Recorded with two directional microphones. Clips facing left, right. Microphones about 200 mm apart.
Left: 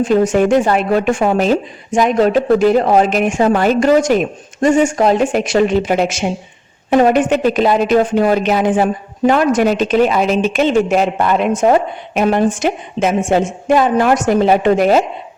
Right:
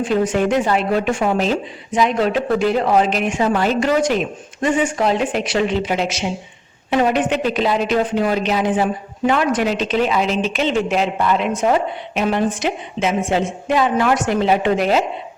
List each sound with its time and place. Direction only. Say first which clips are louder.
0.0 s speech: left 5 dB; 45° left (ahead or behind)